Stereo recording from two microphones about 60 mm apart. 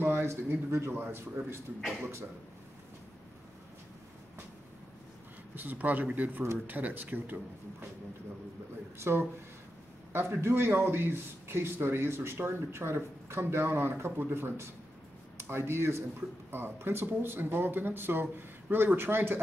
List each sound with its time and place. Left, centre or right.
0.0 s speech: right
5.5 s speech: right
9.0 s speech: right
10.4 s speech: right
10.7 s speech: right